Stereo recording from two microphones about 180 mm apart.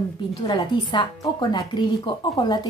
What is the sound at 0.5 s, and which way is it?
Speech, 25° left (ahead or behind).